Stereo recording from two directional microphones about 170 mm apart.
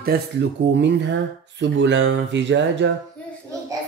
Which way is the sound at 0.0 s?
90° right.